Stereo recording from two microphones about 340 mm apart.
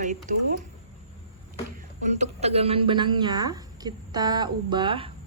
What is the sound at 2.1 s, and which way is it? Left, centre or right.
A woman's voice, centre.